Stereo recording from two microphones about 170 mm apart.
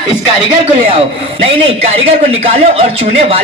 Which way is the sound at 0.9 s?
35° right (ahead or behind).